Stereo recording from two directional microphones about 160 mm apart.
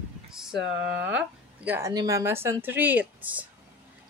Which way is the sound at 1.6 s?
15° right (ahead or behind).